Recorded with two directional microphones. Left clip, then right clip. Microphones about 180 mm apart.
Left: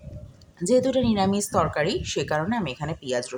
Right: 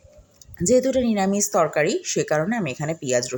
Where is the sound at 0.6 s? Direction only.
10° right (ahead or behind).